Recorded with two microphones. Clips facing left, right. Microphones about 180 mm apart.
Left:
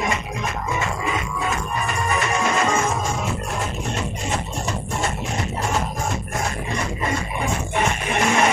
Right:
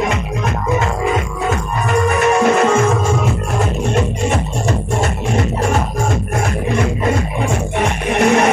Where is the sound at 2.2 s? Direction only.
65° right (ahead or behind).